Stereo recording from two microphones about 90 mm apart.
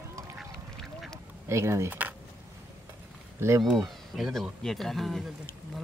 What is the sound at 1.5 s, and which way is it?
Speech, 30° right (ahead or behind).